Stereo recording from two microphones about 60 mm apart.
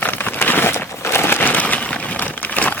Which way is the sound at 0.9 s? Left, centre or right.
Left.